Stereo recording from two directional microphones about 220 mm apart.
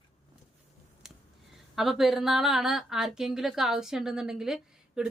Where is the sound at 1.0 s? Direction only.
Centre (ahead or behind).